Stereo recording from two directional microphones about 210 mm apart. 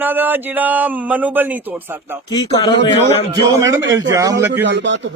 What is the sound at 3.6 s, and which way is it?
Speech, 15° right (ahead or behind).